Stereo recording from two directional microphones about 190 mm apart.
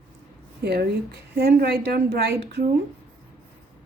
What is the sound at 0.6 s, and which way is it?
A woman's voice, 55° right (ahead or behind).